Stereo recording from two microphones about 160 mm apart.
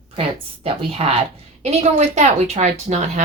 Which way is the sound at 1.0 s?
40° right (ahead or behind).